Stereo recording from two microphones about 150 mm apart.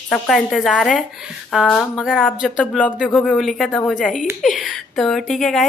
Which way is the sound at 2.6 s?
10° left (ahead or behind).